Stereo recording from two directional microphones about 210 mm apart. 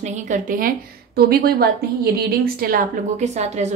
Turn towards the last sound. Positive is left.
turn(degrees=-35)  # may be behind; listen again after turning